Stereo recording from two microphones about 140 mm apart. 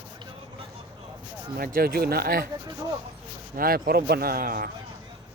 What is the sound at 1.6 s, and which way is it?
Speech, 90° right.